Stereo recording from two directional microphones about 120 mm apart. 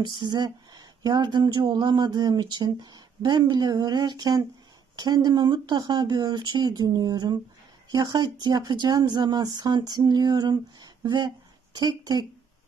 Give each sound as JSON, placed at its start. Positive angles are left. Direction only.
{"t": 0.0, "sound": "speech", "side_deg": -40}